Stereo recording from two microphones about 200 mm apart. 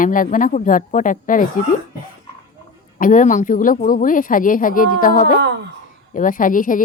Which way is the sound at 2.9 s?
40° left (ahead or behind).